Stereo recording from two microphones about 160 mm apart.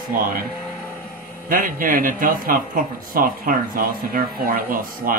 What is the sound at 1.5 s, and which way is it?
Speech, 60° right (ahead or behind).